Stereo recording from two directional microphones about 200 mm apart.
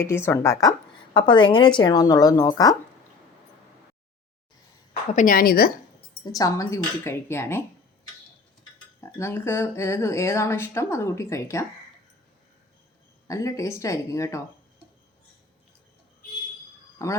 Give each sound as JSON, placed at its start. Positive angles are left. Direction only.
{"t": 0.0, "sound": "a woman's voice", "side_deg": 15}
{"t": 5.1, "sound": "a woman's voice", "side_deg": 45}
{"t": 6.2, "sound": "speech", "side_deg": 15}
{"t": 9.0, "sound": "speech", "side_deg": 15}
{"t": 13.2, "sound": "speech", "side_deg": 15}
{"t": 17.0, "sound": "speech", "side_deg": 15}